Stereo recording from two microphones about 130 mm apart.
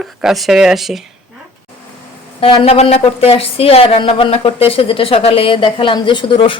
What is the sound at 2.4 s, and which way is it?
Speech, 45° left (ahead or behind).